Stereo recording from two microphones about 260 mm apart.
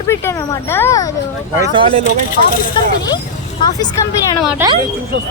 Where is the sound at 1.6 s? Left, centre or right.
Centre.